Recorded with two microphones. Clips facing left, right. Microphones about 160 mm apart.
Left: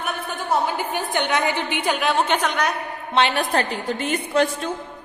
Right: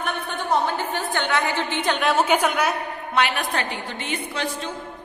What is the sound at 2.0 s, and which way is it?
Speech, 5° right (ahead or behind).